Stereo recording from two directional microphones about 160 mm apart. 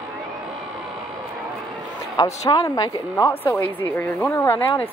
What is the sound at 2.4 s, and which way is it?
A woman's voice, 25° left (ahead or behind).